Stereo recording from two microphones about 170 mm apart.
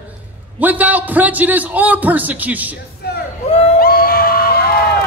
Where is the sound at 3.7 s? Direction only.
60° left (ahead or behind).